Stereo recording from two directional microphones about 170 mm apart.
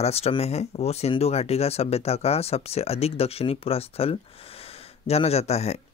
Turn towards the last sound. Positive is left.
turn(degrees=40)  # may be behind; listen again after turning